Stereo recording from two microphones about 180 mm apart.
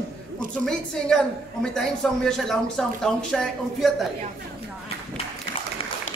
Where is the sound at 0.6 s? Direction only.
5° left (ahead or behind).